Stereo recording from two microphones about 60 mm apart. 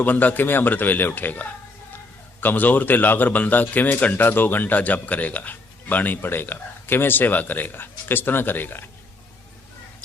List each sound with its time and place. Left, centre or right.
0.0 s a man's voice: left